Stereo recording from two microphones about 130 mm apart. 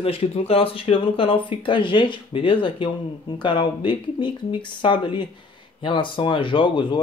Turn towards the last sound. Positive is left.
turn(degrees=40)  # may be behind; listen again after turning